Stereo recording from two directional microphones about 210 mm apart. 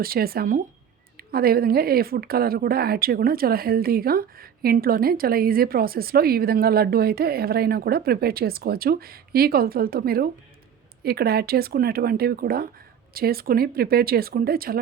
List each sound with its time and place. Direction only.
0.0 s speech: 45° right (ahead or behind)